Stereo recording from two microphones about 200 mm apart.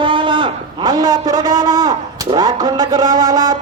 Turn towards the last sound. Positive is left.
turn(degrees=-20)  # may be behind; listen again after turning